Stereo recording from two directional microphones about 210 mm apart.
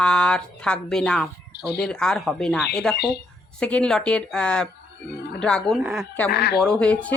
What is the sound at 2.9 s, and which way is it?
Speech, 50° left (ahead or behind).